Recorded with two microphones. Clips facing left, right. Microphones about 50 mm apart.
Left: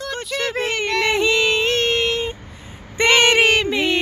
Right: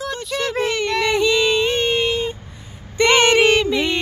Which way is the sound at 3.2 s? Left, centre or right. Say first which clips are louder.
Right 1 dB; centre.